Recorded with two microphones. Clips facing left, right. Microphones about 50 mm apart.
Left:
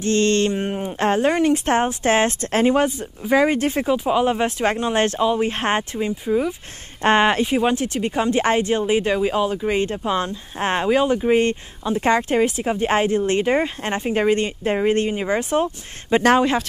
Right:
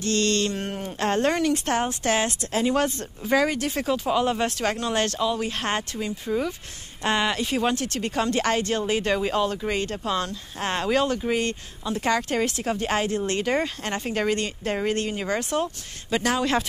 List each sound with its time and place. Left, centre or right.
0.0 s speech: left
1.4 s speech: left
2.7 s speech: centre
3.8 s speech: centre
6.2 s speech: centre
7.0 s speech: left
7.4 s speech: centre
16.2 s speech: left